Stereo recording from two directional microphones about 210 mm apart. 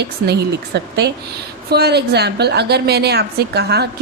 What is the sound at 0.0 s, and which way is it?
A woman's voice, 50° right (ahead or behind).